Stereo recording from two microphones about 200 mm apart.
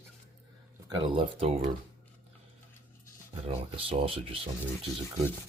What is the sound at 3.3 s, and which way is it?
Speech, 30° right (ahead or behind).